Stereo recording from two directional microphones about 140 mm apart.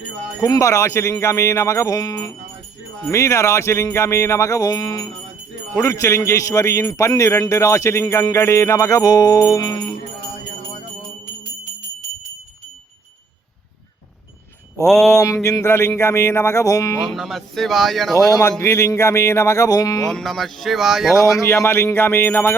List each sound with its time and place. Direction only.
0.4 s a man's voice: 25° left (ahead or behind)
14.8 s speech: centre (ahead or behind)
15.1 s a man's voice: 20° left (ahead or behind)
17.1 s speech: centre (ahead or behind)
18.6 s a man's voice: 20° left (ahead or behind)
20.1 s speech: centre (ahead or behind)
21.4 s speech: 20° left (ahead or behind)